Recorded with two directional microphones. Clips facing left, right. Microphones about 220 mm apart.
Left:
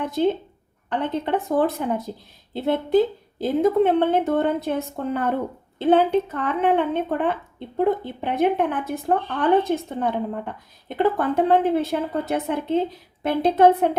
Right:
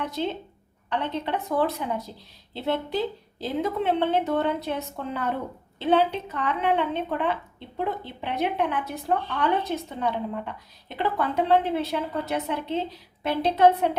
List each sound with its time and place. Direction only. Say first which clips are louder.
0.0 s a woman's voice: left 7 dB; 50° left (ahead or behind)